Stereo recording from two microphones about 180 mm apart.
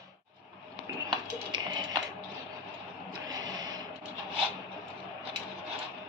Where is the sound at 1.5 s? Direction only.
25° right (ahead or behind).